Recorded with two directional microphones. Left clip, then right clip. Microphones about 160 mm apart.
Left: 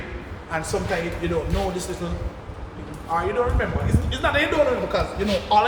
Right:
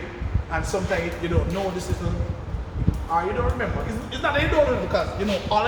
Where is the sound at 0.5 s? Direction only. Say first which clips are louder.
Even; 50° left (ahead or behind).